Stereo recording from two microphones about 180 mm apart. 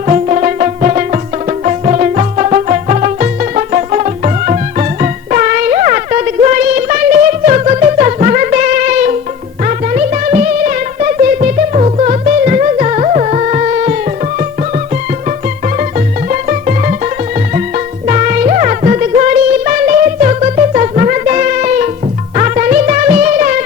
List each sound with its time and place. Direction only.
0.1 s music: 40° right (ahead or behind)
16.3 s music: 45° right (ahead or behind)
18.1 s music: 45° right (ahead or behind)